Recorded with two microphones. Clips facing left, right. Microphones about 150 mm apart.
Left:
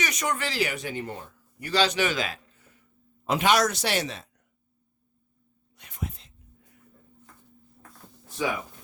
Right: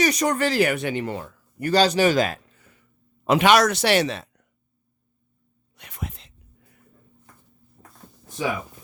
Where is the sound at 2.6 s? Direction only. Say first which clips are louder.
Right 2 dB; 85° right.